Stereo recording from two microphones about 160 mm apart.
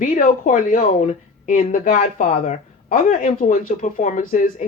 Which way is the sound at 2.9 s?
60° left (ahead or behind).